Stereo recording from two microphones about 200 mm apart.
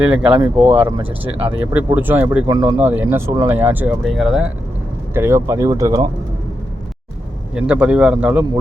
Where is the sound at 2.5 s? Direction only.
20° right (ahead or behind).